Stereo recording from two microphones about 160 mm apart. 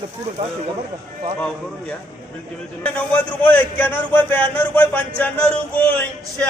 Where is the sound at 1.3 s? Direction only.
10° left (ahead or behind).